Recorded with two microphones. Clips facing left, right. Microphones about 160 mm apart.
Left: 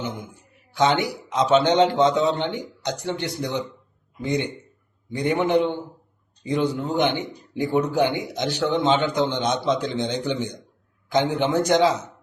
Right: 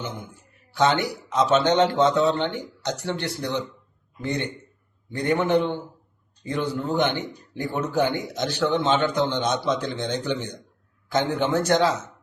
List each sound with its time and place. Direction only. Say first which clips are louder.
0.0 s a man's voice: left 3 dB; 15° left (ahead or behind)